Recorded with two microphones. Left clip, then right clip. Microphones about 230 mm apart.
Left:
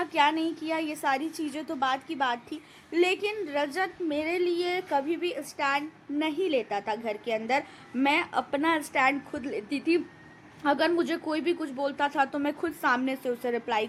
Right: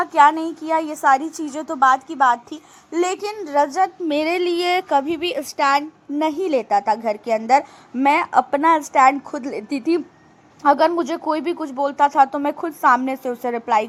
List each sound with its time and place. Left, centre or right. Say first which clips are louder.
0.0 s a woman's voice: right 10 dB; centre
4.1 s a woman's voice: right 8 dB; right; by 13.8 s centre